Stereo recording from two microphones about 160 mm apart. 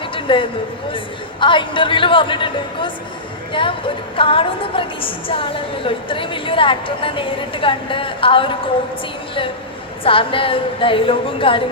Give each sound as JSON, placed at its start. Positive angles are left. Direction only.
{"t": 0.1, "sound": "a sound", "side_deg": 35}
{"t": 0.9, "sound": "a woman's voice", "side_deg": 30}
{"t": 10.0, "sound": "a woman's voice", "side_deg": 35}